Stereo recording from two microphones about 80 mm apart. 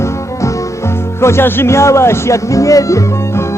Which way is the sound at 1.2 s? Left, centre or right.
Left.